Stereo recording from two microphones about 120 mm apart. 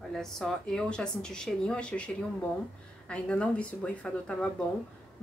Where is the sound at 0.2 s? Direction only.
5° left (ahead or behind).